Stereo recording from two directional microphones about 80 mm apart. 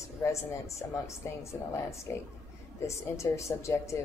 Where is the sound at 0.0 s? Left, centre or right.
Left.